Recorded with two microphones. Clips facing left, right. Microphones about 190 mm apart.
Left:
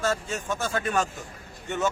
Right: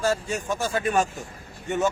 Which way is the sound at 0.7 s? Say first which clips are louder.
Right 3 dB; 20° right (ahead or behind).